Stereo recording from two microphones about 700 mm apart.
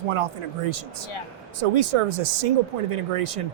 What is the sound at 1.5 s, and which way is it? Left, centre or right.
Speech, right.